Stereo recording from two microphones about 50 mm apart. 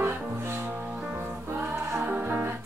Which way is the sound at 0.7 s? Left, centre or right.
Centre.